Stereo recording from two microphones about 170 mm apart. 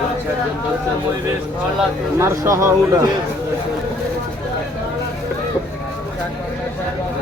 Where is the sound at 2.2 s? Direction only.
15° right (ahead or behind).